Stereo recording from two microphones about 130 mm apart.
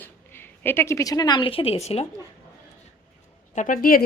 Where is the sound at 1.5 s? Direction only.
45° left (ahead or behind).